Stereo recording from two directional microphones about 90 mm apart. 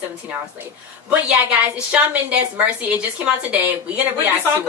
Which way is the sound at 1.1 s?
15° right (ahead or behind).